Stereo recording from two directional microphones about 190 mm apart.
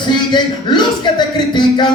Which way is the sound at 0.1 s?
25° left (ahead or behind).